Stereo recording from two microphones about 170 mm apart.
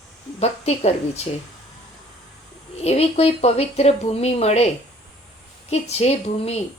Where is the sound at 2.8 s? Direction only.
40° left (ahead or behind).